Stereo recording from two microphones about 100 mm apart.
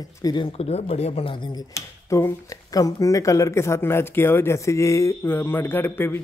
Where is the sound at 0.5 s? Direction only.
90° left.